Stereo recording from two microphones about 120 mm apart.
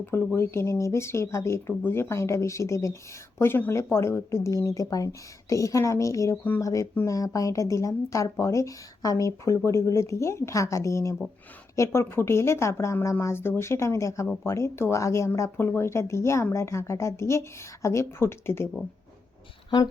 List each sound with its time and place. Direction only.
0.0 s speech: 20° left (ahead or behind)